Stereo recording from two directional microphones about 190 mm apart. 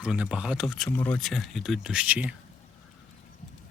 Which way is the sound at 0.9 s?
10° left (ahead or behind).